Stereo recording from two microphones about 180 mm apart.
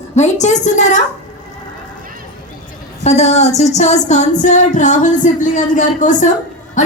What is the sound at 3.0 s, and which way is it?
A woman's voice, 35° left (ahead or behind).